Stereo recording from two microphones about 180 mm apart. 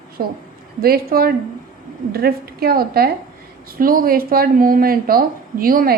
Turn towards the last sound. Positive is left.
turn(degrees=-55)  # may be behind; listen again after turning